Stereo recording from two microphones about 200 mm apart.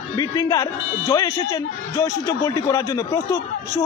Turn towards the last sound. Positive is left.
turn(degrees=15)  # may be behind; listen again after turning